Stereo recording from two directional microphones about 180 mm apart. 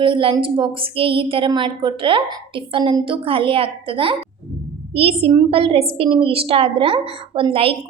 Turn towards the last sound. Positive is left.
turn(degrees=-30)  # may be behind; listen again after turning